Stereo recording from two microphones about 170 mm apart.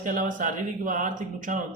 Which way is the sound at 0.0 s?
50° right (ahead or behind).